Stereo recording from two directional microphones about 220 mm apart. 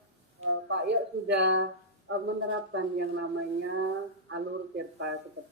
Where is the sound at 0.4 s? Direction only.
55° right (ahead or behind).